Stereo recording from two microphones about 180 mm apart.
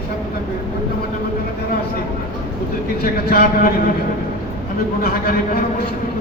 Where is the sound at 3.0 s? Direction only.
55° left (ahead or behind).